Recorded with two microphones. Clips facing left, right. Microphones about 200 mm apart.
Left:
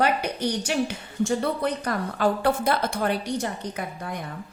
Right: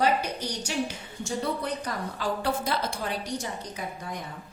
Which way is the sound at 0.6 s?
60° left (ahead or behind).